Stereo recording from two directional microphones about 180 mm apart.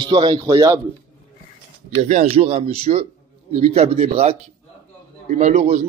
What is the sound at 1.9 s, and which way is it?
A man's voice, 40° right (ahead or behind).